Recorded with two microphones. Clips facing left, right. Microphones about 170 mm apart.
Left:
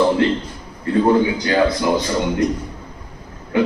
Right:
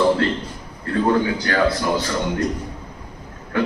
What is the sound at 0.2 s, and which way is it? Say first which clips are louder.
A man's voice: left 4 dB; 15° left (ahead or behind).